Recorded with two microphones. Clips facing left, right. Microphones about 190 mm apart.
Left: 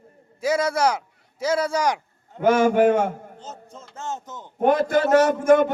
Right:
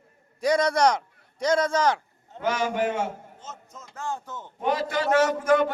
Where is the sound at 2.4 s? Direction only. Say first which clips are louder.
Left 9 dB; 50° left (ahead or behind).